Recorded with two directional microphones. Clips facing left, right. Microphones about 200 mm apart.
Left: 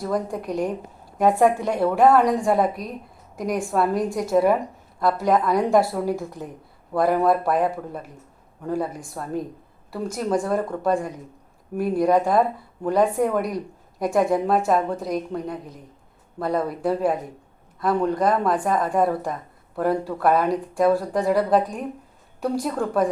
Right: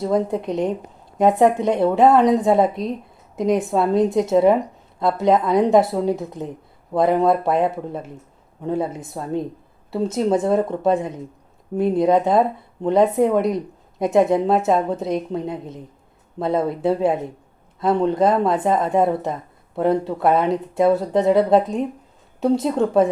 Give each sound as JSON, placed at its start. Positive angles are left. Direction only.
{"t": 0.0, "sound": "a woman's voice", "side_deg": -25}